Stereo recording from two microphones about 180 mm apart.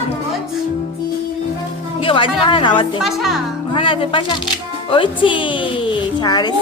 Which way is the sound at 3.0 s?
Centre (ahead or behind).